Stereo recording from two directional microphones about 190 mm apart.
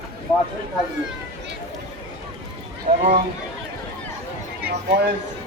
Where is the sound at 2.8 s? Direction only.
40° right (ahead or behind).